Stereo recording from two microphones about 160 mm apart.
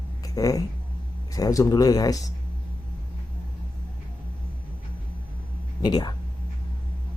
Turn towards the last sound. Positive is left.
turn(degrees=25)  # may be behind; listen again after turning